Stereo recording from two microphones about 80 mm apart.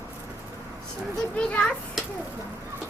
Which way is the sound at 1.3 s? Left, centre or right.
Centre.